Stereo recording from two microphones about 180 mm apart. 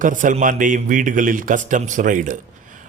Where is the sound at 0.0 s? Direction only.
45° right (ahead or behind).